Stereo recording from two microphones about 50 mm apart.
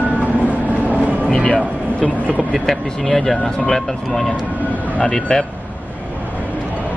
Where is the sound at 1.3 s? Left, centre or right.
Centre.